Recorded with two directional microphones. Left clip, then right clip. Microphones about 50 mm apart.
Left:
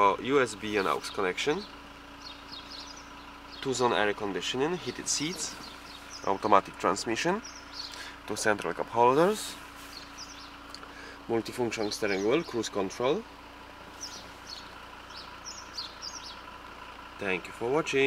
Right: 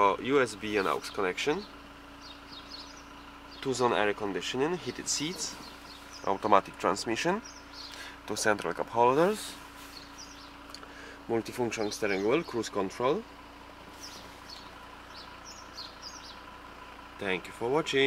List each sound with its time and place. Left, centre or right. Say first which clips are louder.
0.0 s speech: left 1 dB; centre
3.6 s speech: left 1 dB; centre
8.9 s speech: left 1 dB; centre
11.2 s speech: left 1 dB; centre
15.7 s bird: left 4 dB; left
17.2 s speech: left 1 dB; centre